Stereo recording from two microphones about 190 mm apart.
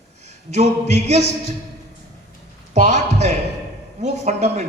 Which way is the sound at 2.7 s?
35° right (ahead or behind).